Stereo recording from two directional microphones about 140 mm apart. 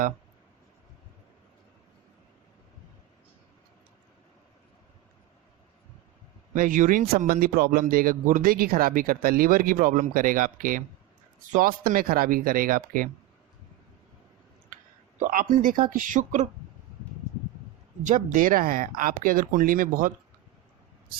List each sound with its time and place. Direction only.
6.5 s a man's voice: 70° right (ahead or behind)
15.2 s speech: 75° right (ahead or behind)
18.0 s speech: 65° right (ahead or behind); by 20.1 s 85° right